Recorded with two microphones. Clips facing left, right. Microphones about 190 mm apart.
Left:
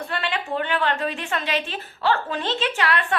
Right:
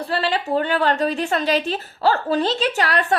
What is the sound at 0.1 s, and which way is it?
A woman's voice, 35° right (ahead or behind).